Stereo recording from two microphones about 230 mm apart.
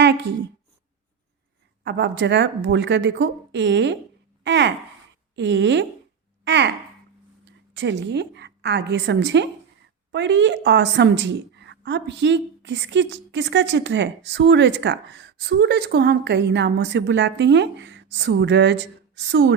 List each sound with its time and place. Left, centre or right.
0.0 s a woman's voice: right
1.8 s a woman's voice: right